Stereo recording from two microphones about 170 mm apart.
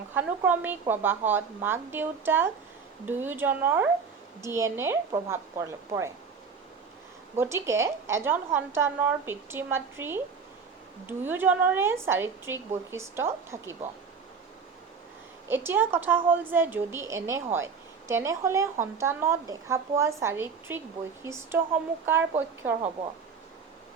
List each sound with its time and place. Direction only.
0.1 s a woman's voice: 10° right (ahead or behind)
7.3 s a woman's voice: 15° right (ahead or behind)
11.2 s a woman's voice: 10° right (ahead or behind)
15.4 s a woman's voice: 15° right (ahead or behind)